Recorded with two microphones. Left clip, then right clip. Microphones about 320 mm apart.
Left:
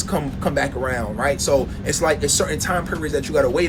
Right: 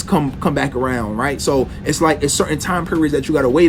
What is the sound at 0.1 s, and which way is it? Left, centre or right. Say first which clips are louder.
Speech: right 5 dB; right.